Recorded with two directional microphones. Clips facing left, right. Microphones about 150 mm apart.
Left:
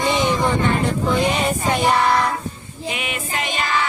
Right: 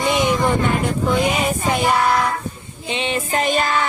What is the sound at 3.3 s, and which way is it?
Music, 40° right (ahead or behind).